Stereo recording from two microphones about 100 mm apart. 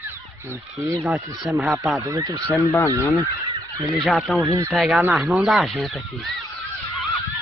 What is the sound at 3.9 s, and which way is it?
Speech, centre (ahead or behind).